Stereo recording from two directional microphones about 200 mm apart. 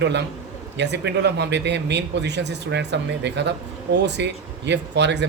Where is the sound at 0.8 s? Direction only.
60° right (ahead or behind).